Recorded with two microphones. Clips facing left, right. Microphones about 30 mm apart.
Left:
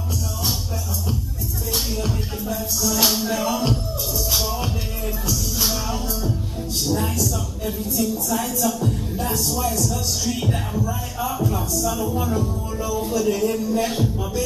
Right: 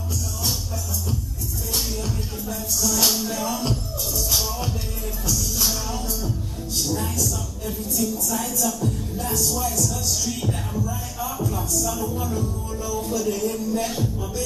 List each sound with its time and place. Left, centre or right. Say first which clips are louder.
1.7 s music: left 3 dB; left
2.8 s speech: left 1 dB; centre
4.3 s music: left 2 dB; centre
6.9 s a sound: left 5 dB; left
8.4 s speech: left 2 dB; centre